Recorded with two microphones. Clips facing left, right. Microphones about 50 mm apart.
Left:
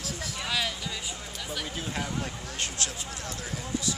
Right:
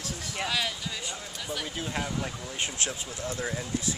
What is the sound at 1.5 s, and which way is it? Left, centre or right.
Speech, centre.